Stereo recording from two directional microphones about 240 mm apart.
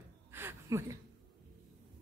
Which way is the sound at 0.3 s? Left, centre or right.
Centre.